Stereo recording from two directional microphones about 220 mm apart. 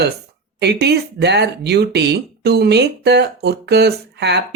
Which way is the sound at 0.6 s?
50° right (ahead or behind).